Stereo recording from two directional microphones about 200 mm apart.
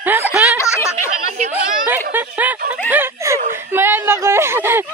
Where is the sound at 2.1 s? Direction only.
10° right (ahead or behind).